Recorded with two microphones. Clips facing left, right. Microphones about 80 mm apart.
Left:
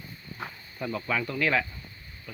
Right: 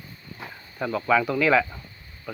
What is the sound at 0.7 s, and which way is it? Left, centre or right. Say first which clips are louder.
Speech: right 8 dB; right.